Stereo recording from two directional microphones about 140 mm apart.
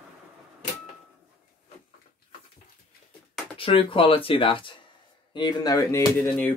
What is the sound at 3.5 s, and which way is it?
Speech, 40° left (ahead or behind).